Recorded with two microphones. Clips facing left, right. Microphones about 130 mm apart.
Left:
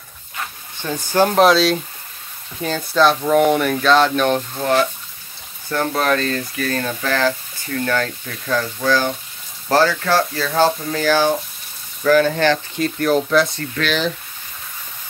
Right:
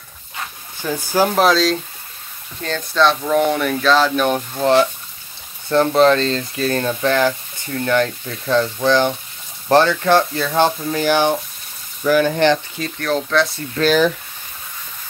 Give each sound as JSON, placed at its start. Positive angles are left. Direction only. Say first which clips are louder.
{"t": 0.7, "sound": "speech", "louder": "left 1 dB", "side_deg": -10}
{"t": 4.6, "sound": "speech", "louder": "right 3 dB", "side_deg": -20}
{"t": 12.7, "sound": "speech", "louder": "left 4 dB", "side_deg": 5}
{"t": 13.7, "sound": "speech", "louder": "right 6 dB", "side_deg": -45}